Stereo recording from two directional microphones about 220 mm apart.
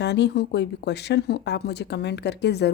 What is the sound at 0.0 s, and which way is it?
A woman's voice, 50° left (ahead or behind).